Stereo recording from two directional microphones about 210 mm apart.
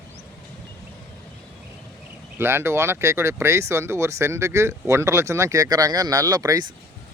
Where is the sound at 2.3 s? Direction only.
10° right (ahead or behind).